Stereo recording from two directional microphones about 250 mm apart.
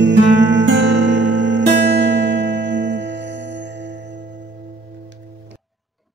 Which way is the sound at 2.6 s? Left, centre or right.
Right.